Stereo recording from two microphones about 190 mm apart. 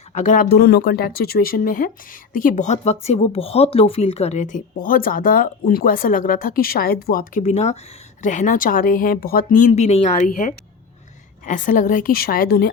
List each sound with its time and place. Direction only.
0.1 s speech: 40° left (ahead or behind)
11.4 s speech: 45° left (ahead or behind)